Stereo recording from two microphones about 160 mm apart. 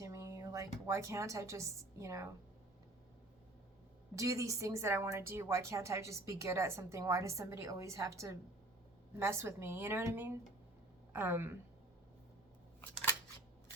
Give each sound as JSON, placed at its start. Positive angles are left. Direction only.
{"t": 0.0, "sound": "a woman's voice", "side_deg": -20}
{"t": 4.1, "sound": "a woman's voice", "side_deg": -20}